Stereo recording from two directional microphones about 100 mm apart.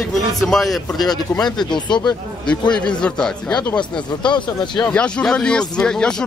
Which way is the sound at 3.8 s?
50° left (ahead or behind).